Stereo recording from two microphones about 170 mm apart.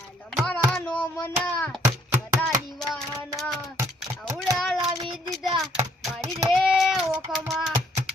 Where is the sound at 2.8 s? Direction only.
Centre (ahead or behind).